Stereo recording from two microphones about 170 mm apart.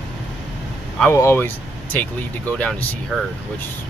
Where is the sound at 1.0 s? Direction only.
15° left (ahead or behind).